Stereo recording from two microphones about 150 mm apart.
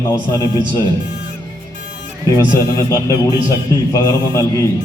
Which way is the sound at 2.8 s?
20° left (ahead or behind).